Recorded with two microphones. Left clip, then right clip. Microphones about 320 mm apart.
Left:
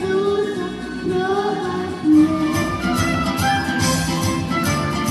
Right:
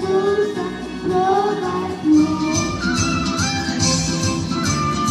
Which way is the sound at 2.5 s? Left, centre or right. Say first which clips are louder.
Even; left.